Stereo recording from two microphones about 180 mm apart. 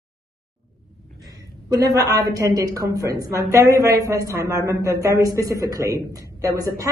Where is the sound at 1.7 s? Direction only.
20° right (ahead or behind).